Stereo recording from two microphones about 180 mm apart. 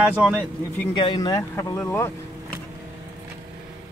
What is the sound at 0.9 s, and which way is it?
Speech, 25° left (ahead or behind).